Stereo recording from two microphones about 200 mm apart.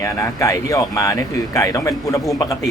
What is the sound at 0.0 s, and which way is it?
Speech, 15° left (ahead or behind).